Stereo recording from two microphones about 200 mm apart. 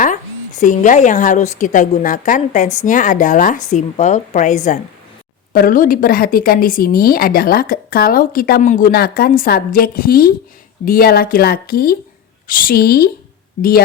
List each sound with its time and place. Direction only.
0.0 s a woman's voice: 40° left (ahead or behind)